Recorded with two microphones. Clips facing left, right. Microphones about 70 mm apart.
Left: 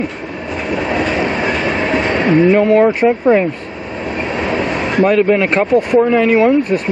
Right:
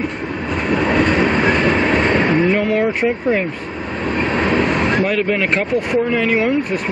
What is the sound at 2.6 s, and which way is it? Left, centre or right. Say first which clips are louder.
Speech: left 7 dB; centre.